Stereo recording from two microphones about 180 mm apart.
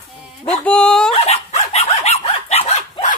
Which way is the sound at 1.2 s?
35° left (ahead or behind).